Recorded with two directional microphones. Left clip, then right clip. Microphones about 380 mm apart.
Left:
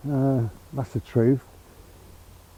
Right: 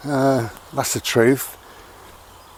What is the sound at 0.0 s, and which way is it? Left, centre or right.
Speech, centre.